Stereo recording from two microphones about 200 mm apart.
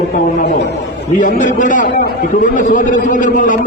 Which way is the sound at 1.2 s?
40° left (ahead or behind).